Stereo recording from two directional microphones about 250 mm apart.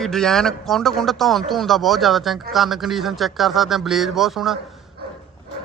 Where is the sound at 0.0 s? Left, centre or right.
Centre.